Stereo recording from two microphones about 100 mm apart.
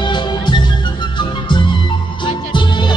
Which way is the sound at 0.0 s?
50° left (ahead or behind).